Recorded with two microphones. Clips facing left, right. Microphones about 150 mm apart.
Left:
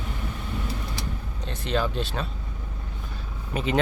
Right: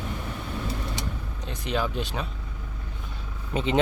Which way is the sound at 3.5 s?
25° right (ahead or behind).